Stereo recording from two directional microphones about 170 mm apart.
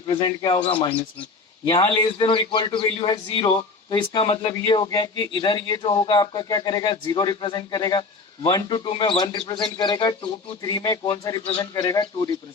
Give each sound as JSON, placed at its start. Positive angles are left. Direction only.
{"t": 0.1, "sound": "a man's voice", "side_deg": 25}